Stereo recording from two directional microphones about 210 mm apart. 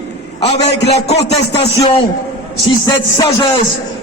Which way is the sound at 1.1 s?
55° left (ahead or behind).